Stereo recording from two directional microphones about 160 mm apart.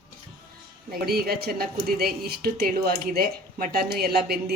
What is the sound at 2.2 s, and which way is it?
Speech, 80° right.